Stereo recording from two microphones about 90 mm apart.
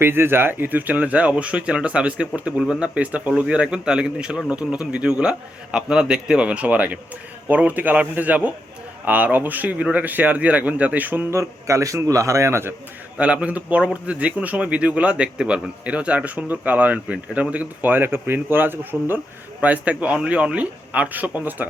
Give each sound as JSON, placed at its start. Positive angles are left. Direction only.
{"t": 0.0, "sound": "speech", "side_deg": -25}
{"t": 11.3, "sound": "speech", "side_deg": -35}
{"t": 13.1, "sound": "speech", "side_deg": -15}